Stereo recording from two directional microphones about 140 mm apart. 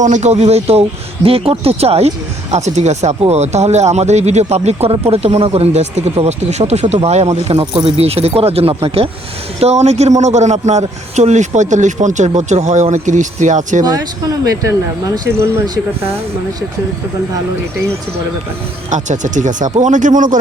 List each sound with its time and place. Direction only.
0.0 s a man's voice: 55° right (ahead or behind)
15.1 s speech: 20° right (ahead or behind)
15.6 s speech: 30° right (ahead or behind)
18.9 s a man's voice: 60° right (ahead or behind)